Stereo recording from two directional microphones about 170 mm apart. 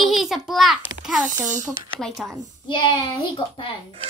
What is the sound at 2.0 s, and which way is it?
Speech, centre (ahead or behind).